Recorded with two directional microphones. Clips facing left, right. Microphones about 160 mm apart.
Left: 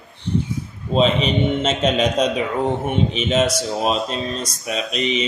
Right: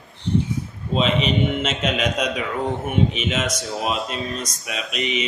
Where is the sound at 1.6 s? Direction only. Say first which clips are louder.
Left 5 dB; 30° left (ahead or behind).